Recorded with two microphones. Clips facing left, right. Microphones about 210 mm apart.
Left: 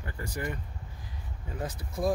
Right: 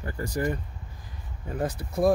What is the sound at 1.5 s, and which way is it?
Speech, 55° right (ahead or behind).